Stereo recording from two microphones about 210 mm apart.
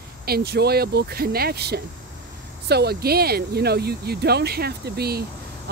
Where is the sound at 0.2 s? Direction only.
50° right (ahead or behind).